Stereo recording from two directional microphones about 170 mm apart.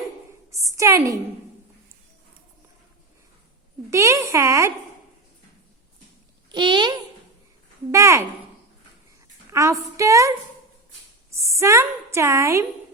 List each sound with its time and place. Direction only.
0.6 s a woman's voice: 20° right (ahead or behind)
3.8 s a woman's voice: 15° right (ahead or behind)
6.5 s a child's voice: 25° right (ahead or behind)
7.9 s a woman's voice: 15° right (ahead or behind)
9.5 s a woman's voice: 20° right (ahead or behind)
11.3 s a woman's voice: 15° right (ahead or behind)